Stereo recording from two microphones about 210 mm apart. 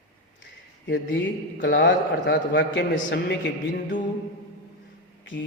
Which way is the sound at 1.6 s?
60° left (ahead or behind).